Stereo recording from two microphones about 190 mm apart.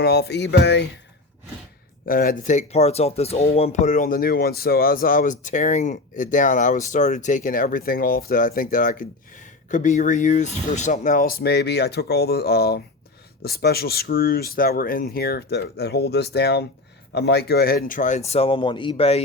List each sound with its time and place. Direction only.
0.0 s speech: 60° left (ahead or behind)
2.0 s speech: 50° left (ahead or behind); by 19.2 s 30° left (ahead or behind)